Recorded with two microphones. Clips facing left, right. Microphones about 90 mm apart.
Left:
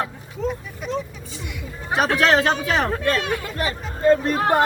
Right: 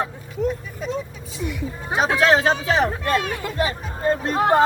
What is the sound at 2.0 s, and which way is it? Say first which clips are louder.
Speech: even; 20° right (ahead or behind).